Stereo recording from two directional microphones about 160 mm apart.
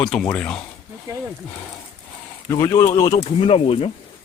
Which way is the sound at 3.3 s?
35° left (ahead or behind).